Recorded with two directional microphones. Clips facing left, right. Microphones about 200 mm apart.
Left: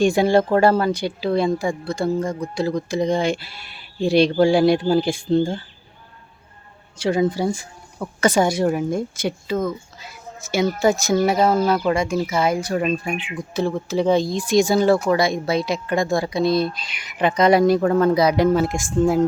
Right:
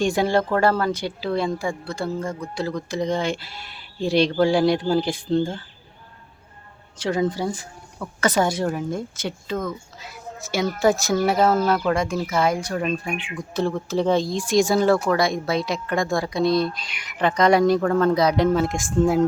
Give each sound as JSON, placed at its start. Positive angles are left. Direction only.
{"t": 0.0, "sound": "speech", "side_deg": 10}
{"t": 7.0, "sound": "speech", "side_deg": 10}
{"t": 11.4, "sound": "speech", "side_deg": 15}
{"t": 13.1, "sound": "speech", "side_deg": 20}
{"t": 13.5, "sound": "speech", "side_deg": 0}
{"t": 16.8, "sound": "speech", "side_deg": 20}
{"t": 17.2, "sound": "speech", "side_deg": 5}